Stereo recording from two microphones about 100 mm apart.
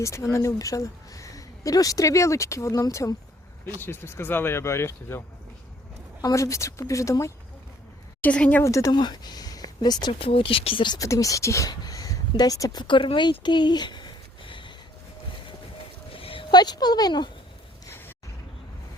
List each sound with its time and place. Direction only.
0.0 s speech: 30° left (ahead or behind)
3.8 s speech: 25° left (ahead or behind)
6.2 s speech: 30° left (ahead or behind)
8.2 s speech: 15° left (ahead or behind)
8.6 s speech: 30° left (ahead or behind)
8.9 s speech: 45° left (ahead or behind)
10.1 s speech: 70° left (ahead or behind)
10.9 s speech: 35° left (ahead or behind)
11.7 s a sound: 40° left (ahead or behind)
12.9 s speech: 55° left (ahead or behind)
16.1 s a sound: 65° left (ahead or behind)
16.5 s speech: 45° left (ahead or behind)
17.8 s a sound: 25° left (ahead or behind)